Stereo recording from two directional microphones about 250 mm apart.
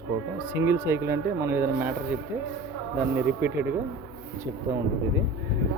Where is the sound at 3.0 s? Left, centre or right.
Centre.